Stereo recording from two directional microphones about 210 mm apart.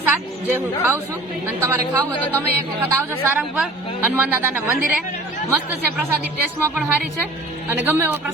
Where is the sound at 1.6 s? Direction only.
10° right (ahead or behind).